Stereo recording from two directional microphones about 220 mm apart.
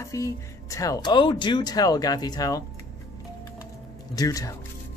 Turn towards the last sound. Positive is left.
turn(degrees=15)  # may be behind; listen again after turning